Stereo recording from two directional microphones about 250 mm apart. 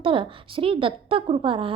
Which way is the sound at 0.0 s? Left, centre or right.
Right.